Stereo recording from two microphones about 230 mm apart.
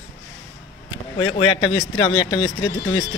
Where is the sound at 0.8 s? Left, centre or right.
Left.